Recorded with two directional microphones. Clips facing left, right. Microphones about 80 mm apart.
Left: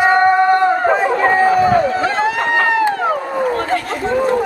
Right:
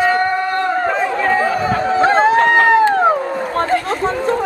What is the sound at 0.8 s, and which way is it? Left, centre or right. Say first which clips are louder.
Chatter: left 3 dB; left.